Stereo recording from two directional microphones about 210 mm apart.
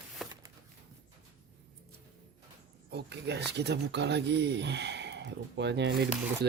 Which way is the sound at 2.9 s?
55° right (ahead or behind).